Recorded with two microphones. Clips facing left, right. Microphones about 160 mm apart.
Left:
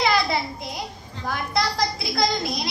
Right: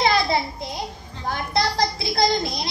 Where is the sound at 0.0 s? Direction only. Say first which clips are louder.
Right 2 dB; 25° right (ahead or behind).